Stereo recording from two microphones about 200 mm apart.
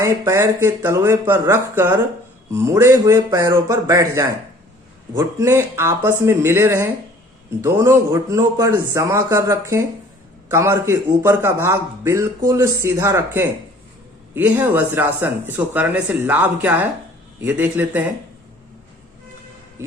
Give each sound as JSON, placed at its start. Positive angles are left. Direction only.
{"t": 0.0, "sound": "speech", "side_deg": -15}